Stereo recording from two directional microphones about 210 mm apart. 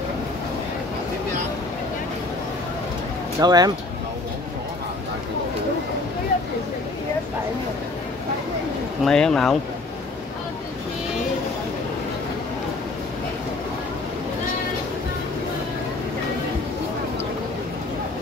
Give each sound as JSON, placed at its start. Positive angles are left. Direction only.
{"t": 3.3, "sound": "speech", "side_deg": -20}
{"t": 9.0, "sound": "speech", "side_deg": 5}